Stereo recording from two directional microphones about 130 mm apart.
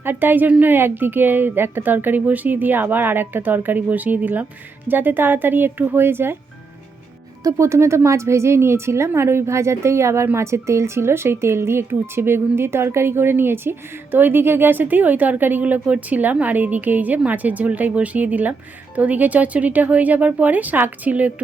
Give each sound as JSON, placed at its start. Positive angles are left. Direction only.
{"t": 0.0, "sound": "a woman's voice", "side_deg": -15}
{"t": 7.4, "sound": "a woman's voice", "side_deg": -20}